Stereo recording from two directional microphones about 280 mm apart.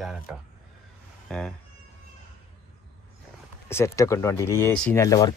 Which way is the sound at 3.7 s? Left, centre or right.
Centre.